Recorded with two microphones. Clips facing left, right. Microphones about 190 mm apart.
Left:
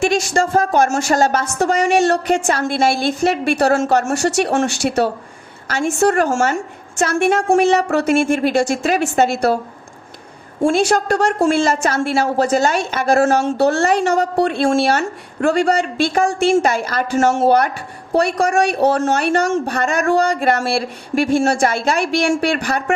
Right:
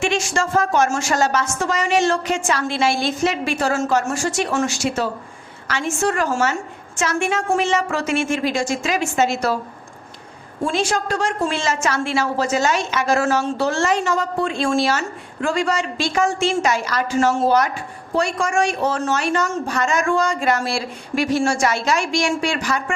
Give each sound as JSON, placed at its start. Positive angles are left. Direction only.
{"t": 0.0, "sound": "speech", "side_deg": 40}
{"t": 1.3, "sound": "a woman's voice", "side_deg": 55}
{"t": 5.6, "sound": "a woman's voice", "side_deg": 45}
{"t": 10.8, "sound": "speech", "side_deg": 65}
{"t": 11.8, "sound": "a woman's voice", "side_deg": 45}
{"t": 18.3, "sound": "speech", "side_deg": 35}
{"t": 18.6, "sound": "speech", "side_deg": 65}